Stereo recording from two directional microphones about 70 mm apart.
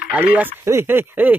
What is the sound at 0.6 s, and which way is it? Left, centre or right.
Speech, right.